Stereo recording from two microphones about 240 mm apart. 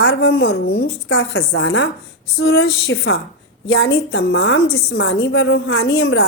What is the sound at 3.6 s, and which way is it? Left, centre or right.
A woman's voice, left.